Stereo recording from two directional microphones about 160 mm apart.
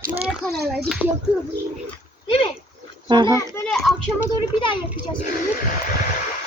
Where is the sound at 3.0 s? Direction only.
30° right (ahead or behind).